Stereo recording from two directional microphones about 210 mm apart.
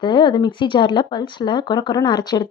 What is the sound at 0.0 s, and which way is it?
Speech, 20° left (ahead or behind).